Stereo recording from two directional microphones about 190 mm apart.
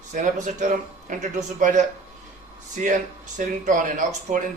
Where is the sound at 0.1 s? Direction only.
40° right (ahead or behind).